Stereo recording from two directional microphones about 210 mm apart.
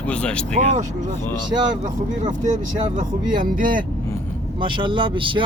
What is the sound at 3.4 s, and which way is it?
Speech, 40° right (ahead or behind).